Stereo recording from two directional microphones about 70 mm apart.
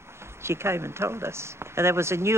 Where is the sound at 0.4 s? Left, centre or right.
Right.